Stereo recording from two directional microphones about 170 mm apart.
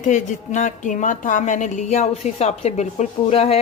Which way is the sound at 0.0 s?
45° left (ahead or behind).